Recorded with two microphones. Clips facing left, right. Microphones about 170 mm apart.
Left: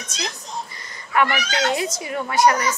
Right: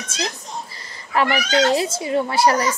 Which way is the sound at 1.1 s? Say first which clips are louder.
Right 3 dB; 30° right (ahead or behind).